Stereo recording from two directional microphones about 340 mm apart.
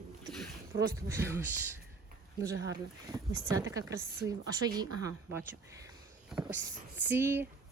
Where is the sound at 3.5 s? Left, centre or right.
Centre.